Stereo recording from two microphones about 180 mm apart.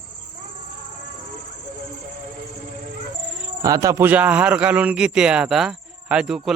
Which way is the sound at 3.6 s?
20° right (ahead or behind).